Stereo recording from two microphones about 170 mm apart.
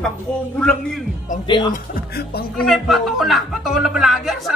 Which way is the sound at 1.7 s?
65° left (ahead or behind).